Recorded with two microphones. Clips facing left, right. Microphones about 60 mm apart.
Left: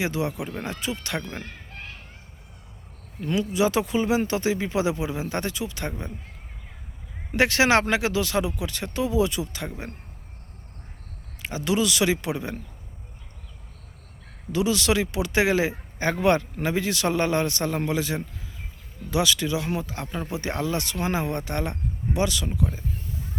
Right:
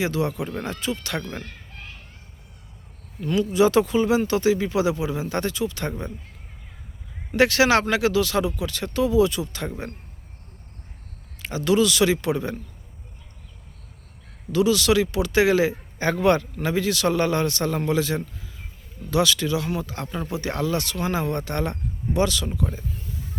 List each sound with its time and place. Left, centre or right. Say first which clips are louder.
0.0 s speech: right 2 dB; centre
3.2 s speech: right 3 dB; centre
3.5 s speech: right 5 dB; centre
7.3 s speech: right 2 dB; left
11.4 s speech: right 4 dB; centre
14.5 s speech: right 4 dB; left